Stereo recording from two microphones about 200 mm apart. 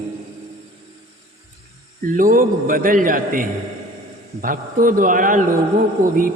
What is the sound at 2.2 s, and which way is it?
A man's voice, 45° right (ahead or behind).